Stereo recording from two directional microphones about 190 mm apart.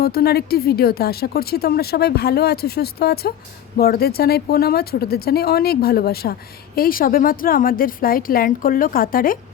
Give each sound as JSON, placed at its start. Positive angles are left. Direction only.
{"t": 0.0, "sound": "a woman's voice", "side_deg": 55}